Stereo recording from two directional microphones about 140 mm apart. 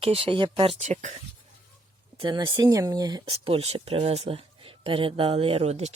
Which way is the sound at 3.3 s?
45° right (ahead or behind).